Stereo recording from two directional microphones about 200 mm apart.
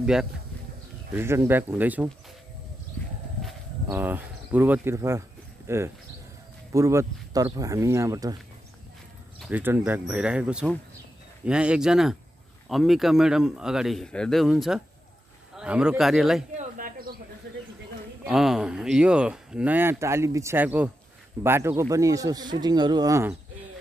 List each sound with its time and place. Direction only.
0.0 s speech: 5° right (ahead or behind)
3.9 s speech: 10° right (ahead or behind)
9.4 s speech: 10° right (ahead or behind)
16.5 s bird: 40° right (ahead or behind)
18.2 s speech: centre (ahead or behind)